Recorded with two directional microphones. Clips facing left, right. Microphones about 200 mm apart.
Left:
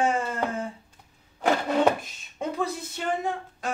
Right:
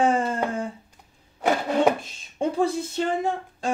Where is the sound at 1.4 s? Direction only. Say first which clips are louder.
Right 1 dB; 10° right (ahead or behind).